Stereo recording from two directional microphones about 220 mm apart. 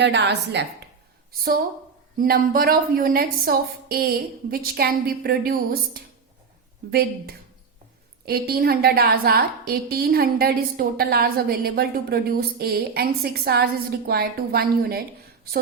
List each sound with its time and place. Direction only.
0.0 s a woman's voice: 50° right (ahead or behind)
8.2 s a woman's voice: 45° right (ahead or behind)